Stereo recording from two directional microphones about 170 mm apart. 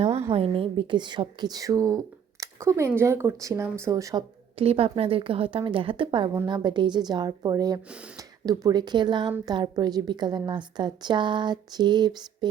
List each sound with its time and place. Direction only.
0.3 s a woman's voice: 35° right (ahead or behind); by 4.2 s 20° right (ahead or behind)
4.5 s a woman's voice: 35° right (ahead or behind)
7.9 s speech: 5° right (ahead or behind)
8.1 s a woman's voice: 20° right (ahead or behind)